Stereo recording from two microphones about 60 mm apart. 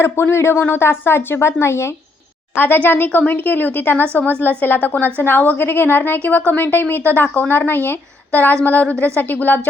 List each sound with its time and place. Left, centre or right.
0.0 s speech: left
2.6 s a woman's voice: left